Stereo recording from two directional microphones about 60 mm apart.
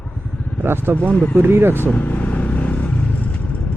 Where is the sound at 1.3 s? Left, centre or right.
Right.